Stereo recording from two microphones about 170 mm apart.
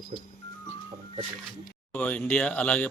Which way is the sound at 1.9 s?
10° left (ahead or behind).